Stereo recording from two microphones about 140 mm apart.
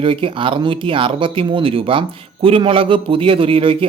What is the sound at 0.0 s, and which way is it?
A man's voice, 40° right (ahead or behind).